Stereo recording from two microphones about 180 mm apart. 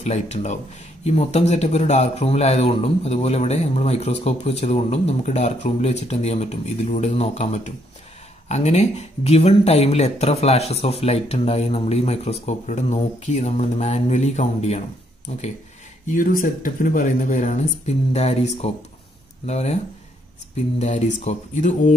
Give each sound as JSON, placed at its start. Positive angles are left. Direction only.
{"t": 0.0, "sound": "a man's voice", "side_deg": 40}
{"t": 16.1, "sound": "a man's voice", "side_deg": 50}
{"t": 20.8, "sound": "a man's voice", "side_deg": 40}